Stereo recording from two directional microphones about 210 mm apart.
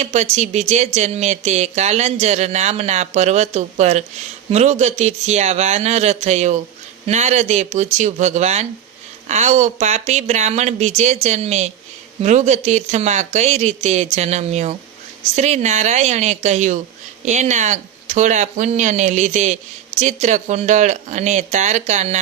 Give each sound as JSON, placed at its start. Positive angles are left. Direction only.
{"t": 0.0, "sound": "speech", "side_deg": -35}